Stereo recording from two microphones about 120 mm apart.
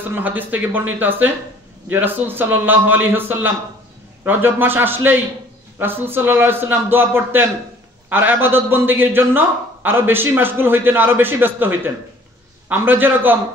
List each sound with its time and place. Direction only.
0.1 s a man's voice: 15° right (ahead or behind)